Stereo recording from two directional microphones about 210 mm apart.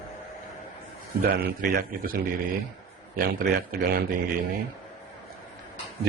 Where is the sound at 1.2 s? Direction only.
40° right (ahead or behind).